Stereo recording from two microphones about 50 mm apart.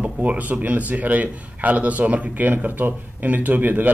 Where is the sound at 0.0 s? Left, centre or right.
Right.